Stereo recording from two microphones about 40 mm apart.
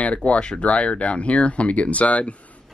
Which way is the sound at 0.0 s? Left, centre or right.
Left.